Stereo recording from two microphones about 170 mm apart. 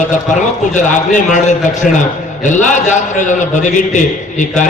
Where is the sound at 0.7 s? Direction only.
45° left (ahead or behind).